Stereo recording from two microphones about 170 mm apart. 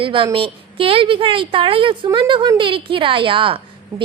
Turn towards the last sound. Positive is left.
turn(degrees=-30)  # may be behind; listen again after turning